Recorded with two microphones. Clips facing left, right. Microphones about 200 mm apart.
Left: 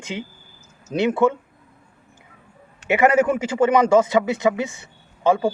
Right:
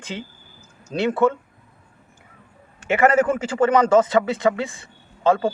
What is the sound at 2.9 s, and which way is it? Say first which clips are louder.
Speech: left 1 dB; 15° left (ahead or behind).